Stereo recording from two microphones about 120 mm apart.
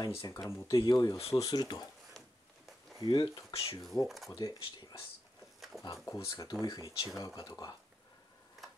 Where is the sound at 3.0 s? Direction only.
40° left (ahead or behind).